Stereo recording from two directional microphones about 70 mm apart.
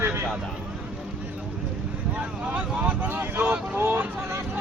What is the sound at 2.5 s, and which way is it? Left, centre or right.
Speech, right.